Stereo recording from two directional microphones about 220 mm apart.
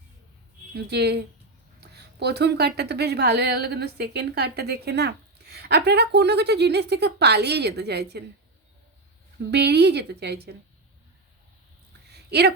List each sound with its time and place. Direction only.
0.8 s a woman's voice: 50° right (ahead or behind)
9.5 s a woman's voice: 50° right (ahead or behind)
12.1 s a sound: 50° right (ahead or behind)